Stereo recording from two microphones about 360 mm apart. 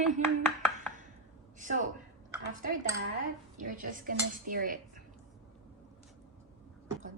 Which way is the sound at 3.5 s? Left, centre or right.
Right.